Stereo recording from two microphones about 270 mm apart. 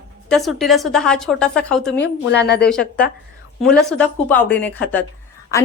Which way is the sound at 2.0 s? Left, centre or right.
Left.